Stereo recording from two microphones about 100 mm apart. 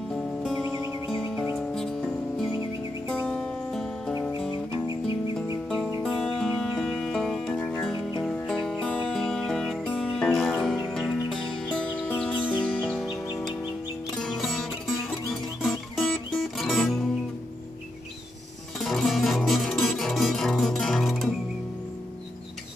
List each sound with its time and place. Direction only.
0.1 s music: centre (ahead or behind)
6.0 s music: 5° left (ahead or behind)
14.1 s music: 5° left (ahead or behind)
18.8 s music: centre (ahead or behind)